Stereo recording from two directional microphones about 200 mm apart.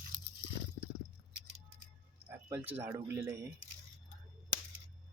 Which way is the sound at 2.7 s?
10° right (ahead or behind).